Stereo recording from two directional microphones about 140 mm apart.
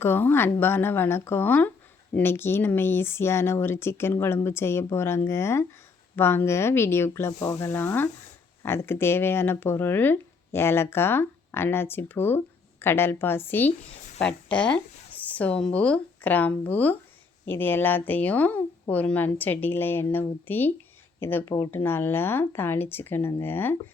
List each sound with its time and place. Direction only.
0.0 s speech: 15° left (ahead or behind)